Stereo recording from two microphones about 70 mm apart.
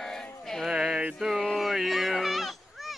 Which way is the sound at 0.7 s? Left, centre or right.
Centre.